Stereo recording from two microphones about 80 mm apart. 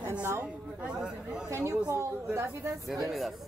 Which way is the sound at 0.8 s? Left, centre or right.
Centre.